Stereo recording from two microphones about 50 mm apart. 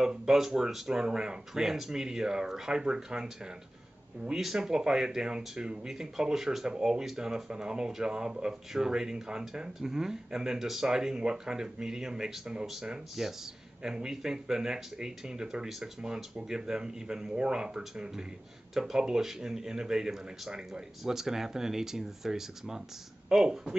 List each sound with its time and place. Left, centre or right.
0.0 s speech: centre
4.4 s speech: centre